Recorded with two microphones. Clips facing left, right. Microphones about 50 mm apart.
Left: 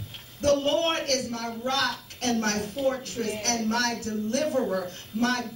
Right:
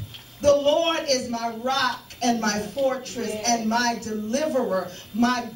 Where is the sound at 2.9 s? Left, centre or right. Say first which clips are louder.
Right 2 dB; right.